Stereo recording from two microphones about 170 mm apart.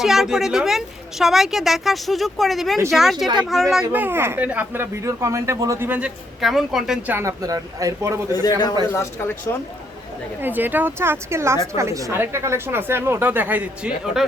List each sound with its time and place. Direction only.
0.0 s a woman's voice: centre (ahead or behind)
6.4 s a woman's voice: centre (ahead or behind)
7.2 s a man's voice: 20° right (ahead or behind)
8.3 s a man's voice: 20° left (ahead or behind)
10.4 s a woman's voice: 10° right (ahead or behind)